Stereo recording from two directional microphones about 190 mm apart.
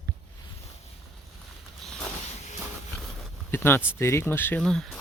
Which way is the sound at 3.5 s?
10° left (ahead or behind).